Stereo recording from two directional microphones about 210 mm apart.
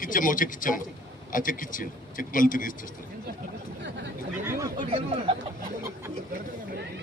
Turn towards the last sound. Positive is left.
turn(degrees=-30)  # may be behind; listen again after turning